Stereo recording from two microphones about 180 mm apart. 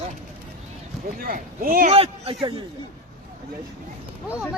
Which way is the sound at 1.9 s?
35° right (ahead or behind).